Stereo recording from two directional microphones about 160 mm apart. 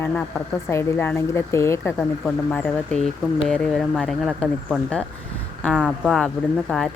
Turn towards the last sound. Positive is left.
turn(degrees=0)  # may be behind; listen again after turning